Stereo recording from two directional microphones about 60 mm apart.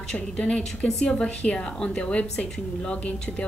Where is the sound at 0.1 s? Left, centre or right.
Centre.